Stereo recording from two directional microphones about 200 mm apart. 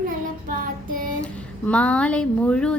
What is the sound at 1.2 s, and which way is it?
Speech, 5° left (ahead or behind).